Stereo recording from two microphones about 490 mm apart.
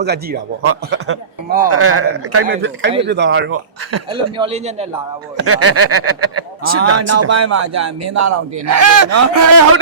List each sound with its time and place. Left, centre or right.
0.0 s a man's voice: centre
4.1 s a man's voice: centre
5.5 s speech: right